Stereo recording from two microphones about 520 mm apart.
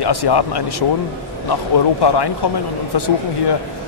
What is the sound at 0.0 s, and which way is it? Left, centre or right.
Speech, left.